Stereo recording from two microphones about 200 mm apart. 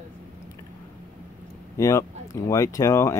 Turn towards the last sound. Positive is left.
turn(degrees=15)  # may be behind; listen again after turning